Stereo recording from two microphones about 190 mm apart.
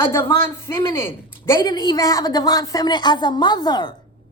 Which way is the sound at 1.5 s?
25° left (ahead or behind).